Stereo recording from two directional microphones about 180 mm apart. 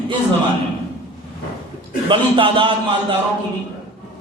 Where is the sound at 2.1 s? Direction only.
30° right (ahead or behind).